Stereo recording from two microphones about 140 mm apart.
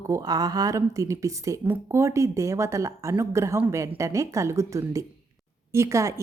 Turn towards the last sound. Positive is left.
turn(degrees=-20)  # may be behind; listen again after turning